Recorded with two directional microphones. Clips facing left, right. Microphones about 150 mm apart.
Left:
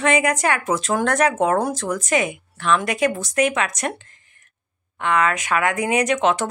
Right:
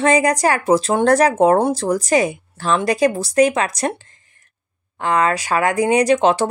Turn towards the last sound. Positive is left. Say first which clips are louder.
# right 5 dB
turn(degrees=-30)  # may be behind; listen again after turning